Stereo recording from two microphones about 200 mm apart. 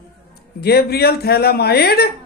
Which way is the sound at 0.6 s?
50° left (ahead or behind).